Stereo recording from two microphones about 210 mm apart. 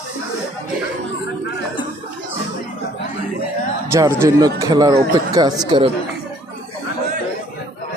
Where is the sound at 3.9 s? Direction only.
15° right (ahead or behind).